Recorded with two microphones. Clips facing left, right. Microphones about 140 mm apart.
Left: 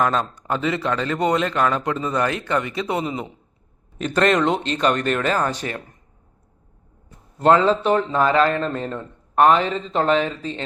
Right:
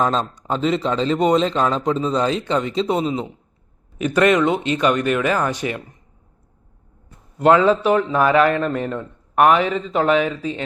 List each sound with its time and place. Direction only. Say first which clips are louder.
0.0 s a man's voice: right 1 dB; 20° right (ahead or behind)
7.3 s a man's voice: right 2 dB; 10° right (ahead or behind)